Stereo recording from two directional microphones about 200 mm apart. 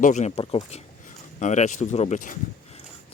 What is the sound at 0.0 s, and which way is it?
Speech, 35° left (ahead or behind).